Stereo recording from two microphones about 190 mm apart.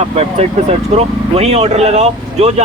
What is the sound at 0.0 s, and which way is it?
Speech, 35° right (ahead or behind).